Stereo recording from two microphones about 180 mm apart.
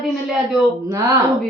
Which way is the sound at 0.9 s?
15° right (ahead or behind).